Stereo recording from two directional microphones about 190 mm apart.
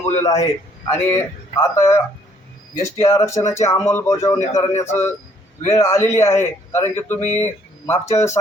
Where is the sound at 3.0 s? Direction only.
15° left (ahead or behind).